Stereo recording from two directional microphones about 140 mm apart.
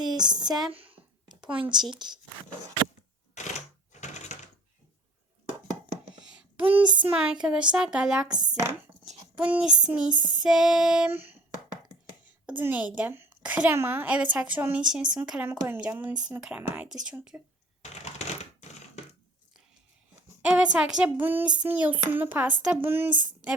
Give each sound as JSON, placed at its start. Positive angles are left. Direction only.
{"t": 0.0, "sound": "a sound", "side_deg": -30}
{"t": 1.7, "sound": "child singing", "side_deg": -30}
{"t": 3.4, "sound": "camera", "side_deg": 55}
{"t": 4.0, "sound": "typewriter", "side_deg": 55}
{"t": 6.8, "sound": "child singing", "side_deg": -35}
{"t": 7.3, "sound": "speech", "side_deg": -5}
{"t": 9.3, "sound": "a woman's voice", "side_deg": -10}
{"t": 11.1, "sound": "speech", "side_deg": -15}
{"t": 12.5, "sound": "a woman's voice", "side_deg": -10}
{"t": 17.8, "sound": "typewriter", "side_deg": 50}
{"t": 20.4, "sound": "a woman's voice", "side_deg": -5}